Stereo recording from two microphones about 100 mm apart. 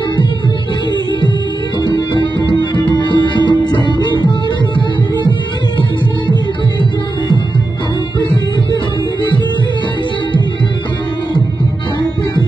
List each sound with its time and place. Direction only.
1.8 s music: 45° left (ahead or behind)